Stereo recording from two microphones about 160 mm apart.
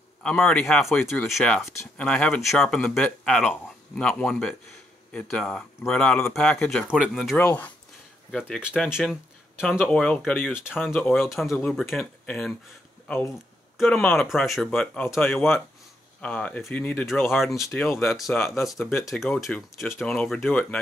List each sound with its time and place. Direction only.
0.2 s speech: 5° left (ahead or behind)
1.7 s speech: 15° left (ahead or behind); by 7.3 s 5° right (ahead or behind)
7.3 s speech: 10° left (ahead or behind)
10.4 s speech: 5° right (ahead or behind)
13.7 s speech: centre (ahead or behind)